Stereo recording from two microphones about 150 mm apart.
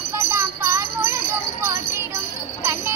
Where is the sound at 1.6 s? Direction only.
15° right (ahead or behind).